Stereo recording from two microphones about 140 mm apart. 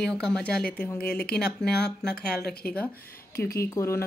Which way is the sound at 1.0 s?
90° left.